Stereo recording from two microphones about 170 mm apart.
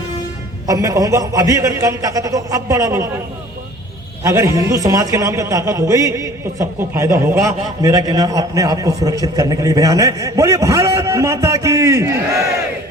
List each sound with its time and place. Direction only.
0.7 s a man's voice: 20° right (ahead or behind)
4.2 s a man's voice: 15° right (ahead or behind)